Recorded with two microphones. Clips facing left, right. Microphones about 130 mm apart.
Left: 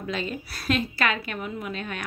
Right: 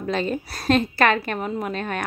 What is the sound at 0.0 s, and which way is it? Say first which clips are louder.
Speech: right 6 dB; 40° right (ahead or behind).